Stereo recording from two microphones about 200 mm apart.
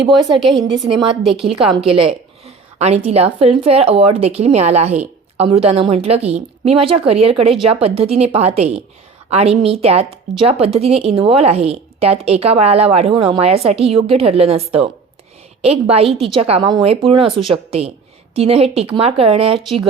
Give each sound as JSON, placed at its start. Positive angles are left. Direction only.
{"t": 1.2, "sound": "a woman's voice", "side_deg": 0}
{"t": 1.5, "sound": "a woman's voice", "side_deg": -25}